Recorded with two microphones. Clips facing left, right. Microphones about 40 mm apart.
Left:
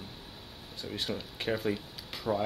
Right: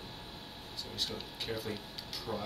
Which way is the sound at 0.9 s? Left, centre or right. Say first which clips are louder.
Left 4 dB; left.